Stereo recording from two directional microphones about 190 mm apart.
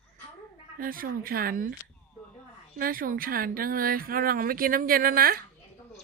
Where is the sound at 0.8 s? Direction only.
50° right (ahead or behind).